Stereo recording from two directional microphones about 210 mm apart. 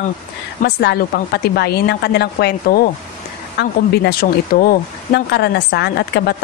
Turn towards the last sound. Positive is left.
turn(degrees=50)  # may be behind; listen again after turning